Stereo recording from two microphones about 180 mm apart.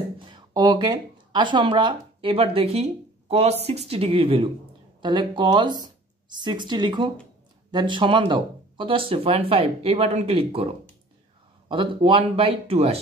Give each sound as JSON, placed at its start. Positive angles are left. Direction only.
{"t": 0.2, "sound": "speech", "side_deg": -25}
{"t": 11.7, "sound": "speech", "side_deg": -30}